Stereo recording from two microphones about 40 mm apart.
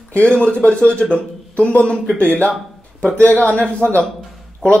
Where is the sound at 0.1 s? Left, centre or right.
Left.